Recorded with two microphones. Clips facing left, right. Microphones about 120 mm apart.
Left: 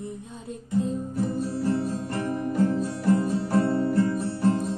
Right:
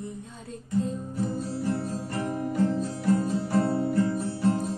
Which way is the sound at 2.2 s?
15° right (ahead or behind).